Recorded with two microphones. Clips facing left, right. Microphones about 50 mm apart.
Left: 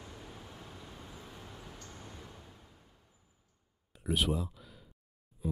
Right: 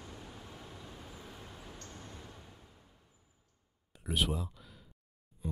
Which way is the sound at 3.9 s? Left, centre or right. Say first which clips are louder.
Left 2 dB; centre.